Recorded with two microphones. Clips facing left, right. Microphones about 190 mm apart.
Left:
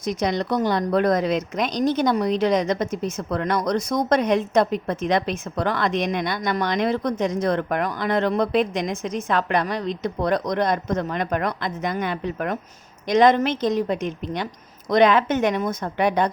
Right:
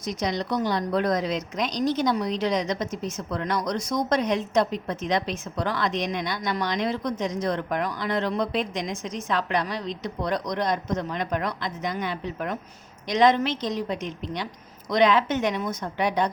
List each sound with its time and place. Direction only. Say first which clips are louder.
0.0 s a woman's voice: left 4 dB; 55° left (ahead or behind)